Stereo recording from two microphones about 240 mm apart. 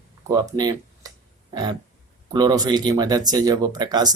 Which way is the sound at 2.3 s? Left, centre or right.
Centre.